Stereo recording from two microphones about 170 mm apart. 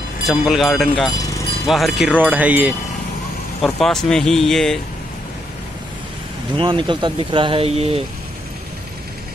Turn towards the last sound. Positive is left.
turn(degrees=-35)  # may be behind; listen again after turning